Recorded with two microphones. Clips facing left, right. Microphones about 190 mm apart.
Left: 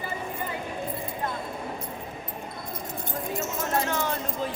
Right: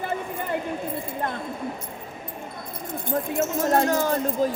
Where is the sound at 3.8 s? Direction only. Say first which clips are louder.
Right 6 dB; 40° right (ahead or behind).